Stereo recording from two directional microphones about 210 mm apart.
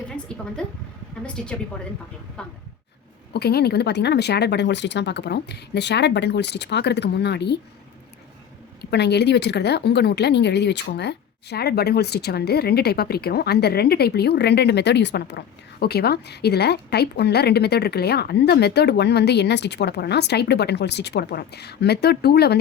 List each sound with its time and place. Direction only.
1.2 s a woman's voice: 5° left (ahead or behind)
3.3 s a woman's voice: 50° left (ahead or behind)
8.8 s a woman's voice: 50° left (ahead or behind)